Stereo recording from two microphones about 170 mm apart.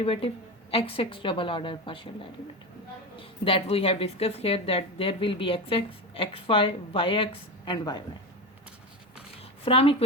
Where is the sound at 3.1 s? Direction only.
30° left (ahead or behind).